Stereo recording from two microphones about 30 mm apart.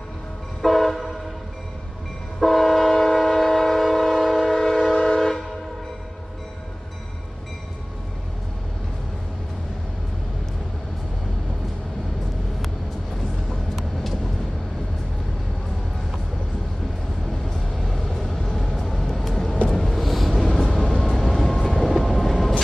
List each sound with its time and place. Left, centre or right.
0.6 s train: centre
2.4 s train: centre
13.5 s vehicle: centre
17.3 s vehicle: centre
19.9 s vehicle: centre
21.8 s train: centre